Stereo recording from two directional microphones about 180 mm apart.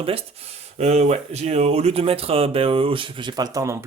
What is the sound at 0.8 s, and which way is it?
A man's voice, 40° right (ahead or behind).